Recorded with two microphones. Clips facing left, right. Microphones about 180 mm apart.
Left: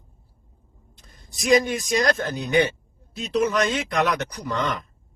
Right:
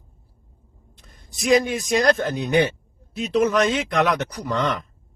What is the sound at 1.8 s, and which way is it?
Speech, 40° right (ahead or behind).